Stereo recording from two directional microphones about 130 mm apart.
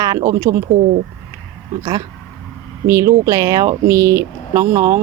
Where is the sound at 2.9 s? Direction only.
25° right (ahead or behind).